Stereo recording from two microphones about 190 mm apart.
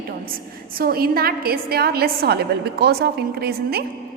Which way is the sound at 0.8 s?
50° right (ahead or behind).